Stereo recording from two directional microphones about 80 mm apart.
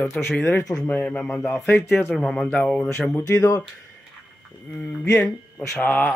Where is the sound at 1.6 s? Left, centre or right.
Left.